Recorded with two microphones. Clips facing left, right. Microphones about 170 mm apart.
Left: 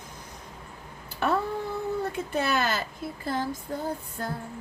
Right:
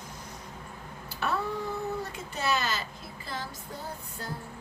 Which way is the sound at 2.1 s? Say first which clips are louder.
Left 4 dB; 55° left (ahead or behind).